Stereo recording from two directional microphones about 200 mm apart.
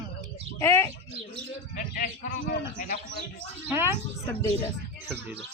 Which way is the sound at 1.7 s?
40° left (ahead or behind).